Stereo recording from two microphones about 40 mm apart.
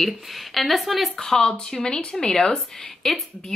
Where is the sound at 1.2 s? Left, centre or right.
Centre.